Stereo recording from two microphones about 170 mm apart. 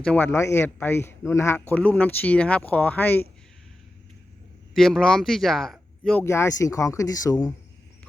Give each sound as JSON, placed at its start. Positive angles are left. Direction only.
{"t": 0.0, "sound": "speech", "side_deg": 10}
{"t": 4.7, "sound": "speech", "side_deg": 0}
{"t": 6.2, "sound": "speech", "side_deg": 15}